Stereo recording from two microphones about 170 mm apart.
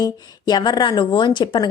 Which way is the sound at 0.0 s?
25° left (ahead or behind).